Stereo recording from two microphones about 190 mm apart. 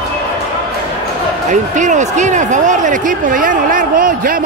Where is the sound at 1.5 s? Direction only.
40° right (ahead or behind).